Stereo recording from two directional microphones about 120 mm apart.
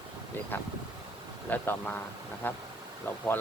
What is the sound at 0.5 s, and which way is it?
A man's voice, 15° left (ahead or behind).